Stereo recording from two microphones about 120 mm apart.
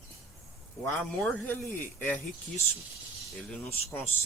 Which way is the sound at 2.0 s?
15° left (ahead or behind).